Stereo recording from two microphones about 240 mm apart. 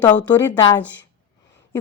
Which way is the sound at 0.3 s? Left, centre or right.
Centre.